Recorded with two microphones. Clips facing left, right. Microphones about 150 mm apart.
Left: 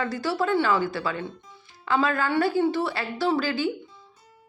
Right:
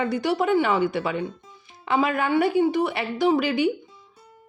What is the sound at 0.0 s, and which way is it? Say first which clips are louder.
A woman's voice: right 3 dB; 20° right (ahead or behind).